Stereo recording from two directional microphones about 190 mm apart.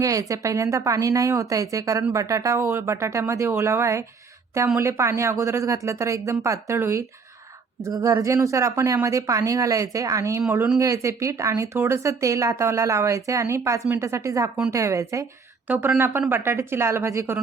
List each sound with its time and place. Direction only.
0.0 s speech: 15° right (ahead or behind)